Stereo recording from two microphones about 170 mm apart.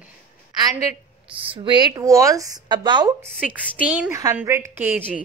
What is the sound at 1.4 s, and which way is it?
Speech, 30° right (ahead or behind).